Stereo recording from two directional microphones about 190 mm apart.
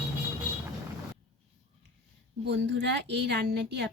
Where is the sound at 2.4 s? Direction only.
65° right (ahead or behind).